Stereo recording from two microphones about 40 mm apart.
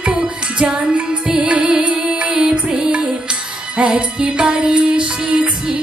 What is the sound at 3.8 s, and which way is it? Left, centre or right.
Music, right.